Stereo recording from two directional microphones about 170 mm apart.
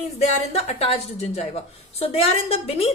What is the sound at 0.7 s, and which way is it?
A woman's voice, 35° left (ahead or behind).